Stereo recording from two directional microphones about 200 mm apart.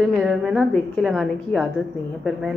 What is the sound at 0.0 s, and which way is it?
A woman's voice, centre (ahead or behind).